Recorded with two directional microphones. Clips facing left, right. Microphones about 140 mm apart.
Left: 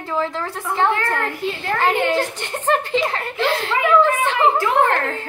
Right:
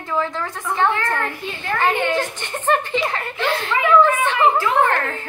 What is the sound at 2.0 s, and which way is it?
A woman's voice, 35° left (ahead or behind).